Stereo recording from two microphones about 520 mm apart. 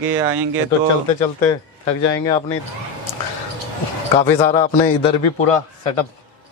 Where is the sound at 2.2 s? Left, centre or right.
Centre.